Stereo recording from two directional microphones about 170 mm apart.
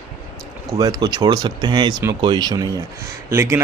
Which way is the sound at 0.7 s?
25° right (ahead or behind).